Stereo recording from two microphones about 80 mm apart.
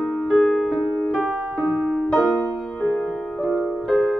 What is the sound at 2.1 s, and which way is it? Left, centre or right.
Music, centre.